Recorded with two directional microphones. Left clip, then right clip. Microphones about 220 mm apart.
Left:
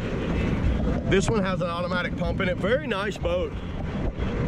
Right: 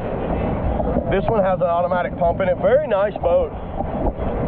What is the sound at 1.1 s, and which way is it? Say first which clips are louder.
Speech: right 5 dB; 10° right (ahead or behind).